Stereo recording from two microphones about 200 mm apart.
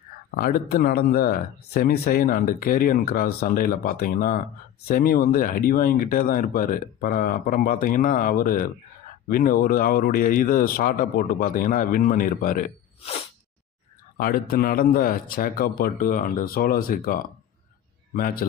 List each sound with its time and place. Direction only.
0.3 s speech: 45° left (ahead or behind)
14.2 s speech: 45° left (ahead or behind)